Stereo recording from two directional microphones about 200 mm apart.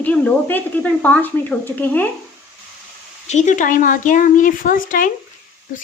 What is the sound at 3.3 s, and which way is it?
Speech, 35° left (ahead or behind).